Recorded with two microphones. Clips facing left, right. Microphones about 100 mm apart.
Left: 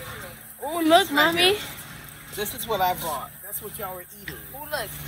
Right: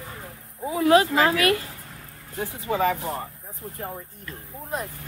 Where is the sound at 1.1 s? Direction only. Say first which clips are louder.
Even; 25° left (ahead or behind).